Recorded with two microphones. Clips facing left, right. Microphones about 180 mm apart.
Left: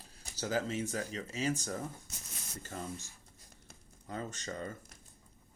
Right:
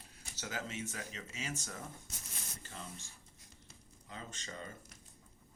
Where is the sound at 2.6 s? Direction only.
45° left (ahead or behind).